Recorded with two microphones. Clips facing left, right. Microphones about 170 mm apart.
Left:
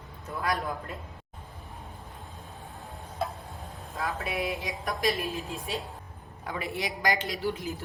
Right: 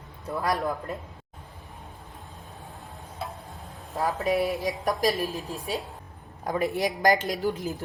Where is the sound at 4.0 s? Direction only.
40° right (ahead or behind).